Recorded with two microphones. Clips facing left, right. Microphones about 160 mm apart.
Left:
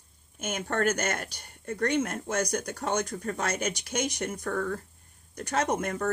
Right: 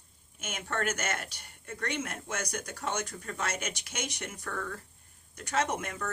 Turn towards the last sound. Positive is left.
turn(degrees=40)  # may be behind; listen again after turning